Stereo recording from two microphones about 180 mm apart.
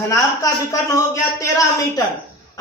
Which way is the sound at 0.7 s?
15° left (ahead or behind).